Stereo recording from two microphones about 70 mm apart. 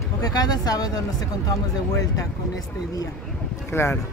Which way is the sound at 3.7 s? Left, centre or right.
Left.